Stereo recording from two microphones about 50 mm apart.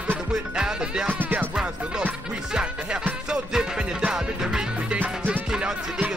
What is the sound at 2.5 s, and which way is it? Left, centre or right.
Music, centre.